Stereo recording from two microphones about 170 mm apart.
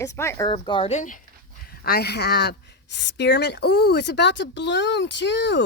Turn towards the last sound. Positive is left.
turn(degrees=90)